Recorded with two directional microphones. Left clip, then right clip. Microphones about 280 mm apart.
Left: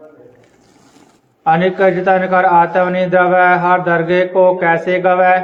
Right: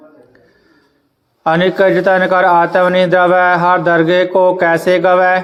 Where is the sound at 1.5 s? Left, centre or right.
Right.